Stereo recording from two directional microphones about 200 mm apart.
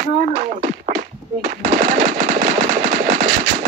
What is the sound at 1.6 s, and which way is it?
Machine gun, 40° right (ahead or behind).